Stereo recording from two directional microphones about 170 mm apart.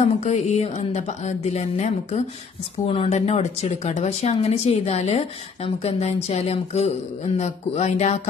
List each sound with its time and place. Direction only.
0.0 s speech: 40° left (ahead or behind)